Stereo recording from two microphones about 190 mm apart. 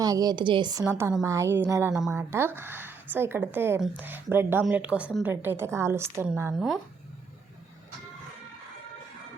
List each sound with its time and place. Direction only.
0.0 s a woman's voice: 20° right (ahead or behind); by 2.1 s centre (ahead or behind)
2.1 s speech: 15° right (ahead or behind)
6.5 s speech: centre (ahead or behind)